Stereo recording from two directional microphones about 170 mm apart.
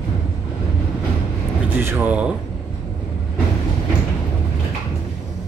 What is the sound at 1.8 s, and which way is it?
Speech, 10° right (ahead or behind).